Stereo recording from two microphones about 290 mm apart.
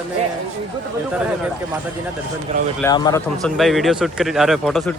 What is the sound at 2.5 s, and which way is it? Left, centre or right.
Speech, right.